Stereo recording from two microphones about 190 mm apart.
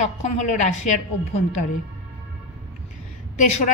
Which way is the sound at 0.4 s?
40° left (ahead or behind).